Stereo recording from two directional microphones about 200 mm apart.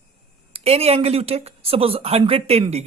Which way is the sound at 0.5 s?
30° right (ahead or behind).